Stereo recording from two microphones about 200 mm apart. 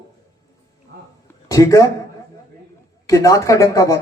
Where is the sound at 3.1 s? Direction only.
15° left (ahead or behind).